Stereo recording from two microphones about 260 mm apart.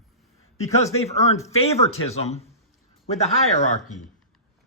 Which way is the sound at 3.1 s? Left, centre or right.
Left.